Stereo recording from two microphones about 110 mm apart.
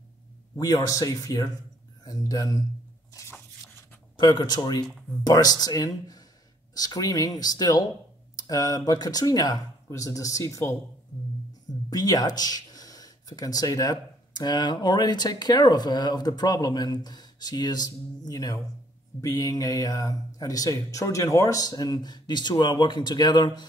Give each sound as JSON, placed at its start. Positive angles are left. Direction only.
{"t": 0.6, "sound": "speech", "side_deg": 35}
{"t": 3.1, "sound": "patter", "side_deg": 30}
{"t": 4.2, "sound": "speech", "side_deg": 40}
{"t": 11.9, "sound": "speech", "side_deg": 35}